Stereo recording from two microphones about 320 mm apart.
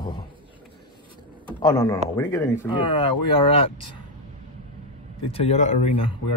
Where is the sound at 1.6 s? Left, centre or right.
Centre.